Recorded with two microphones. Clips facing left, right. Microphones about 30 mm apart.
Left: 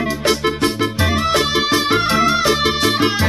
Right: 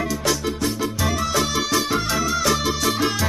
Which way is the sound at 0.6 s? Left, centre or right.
Left.